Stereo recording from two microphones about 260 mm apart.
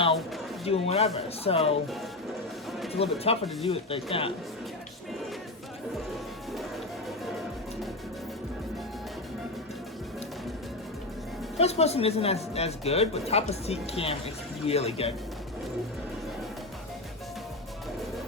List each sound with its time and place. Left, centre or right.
0.6 s speech: left
2.9 s speech: left
11.5 s speech: left